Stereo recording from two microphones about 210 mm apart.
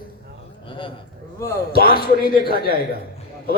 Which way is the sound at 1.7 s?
45° left (ahead or behind).